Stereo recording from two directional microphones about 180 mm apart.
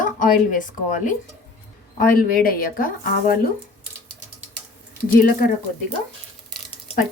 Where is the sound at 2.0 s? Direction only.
55° left (ahead or behind).